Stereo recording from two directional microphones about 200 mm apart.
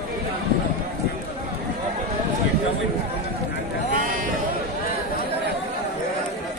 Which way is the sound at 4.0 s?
40° right (ahead or behind).